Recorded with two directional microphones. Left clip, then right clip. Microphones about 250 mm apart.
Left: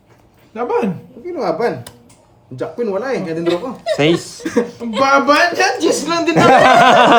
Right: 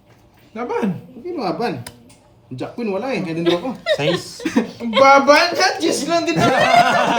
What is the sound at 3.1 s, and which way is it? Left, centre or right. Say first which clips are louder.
Speech: left 1 dB; centre.